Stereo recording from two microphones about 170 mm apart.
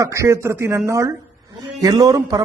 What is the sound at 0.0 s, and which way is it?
A man's voice, 15° right (ahead or behind).